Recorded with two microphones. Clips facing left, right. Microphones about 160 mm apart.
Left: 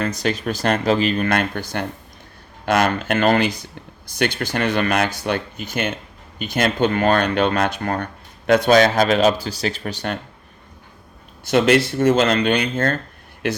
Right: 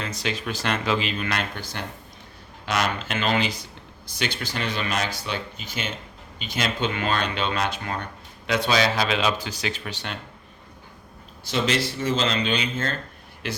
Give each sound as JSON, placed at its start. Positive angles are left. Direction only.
{"t": 0.0, "sound": "speech", "side_deg": 45}
{"t": 11.5, "sound": "speech", "side_deg": 60}